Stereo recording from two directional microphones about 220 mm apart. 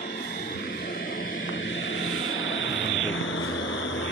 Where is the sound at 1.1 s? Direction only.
60° left (ahead or behind).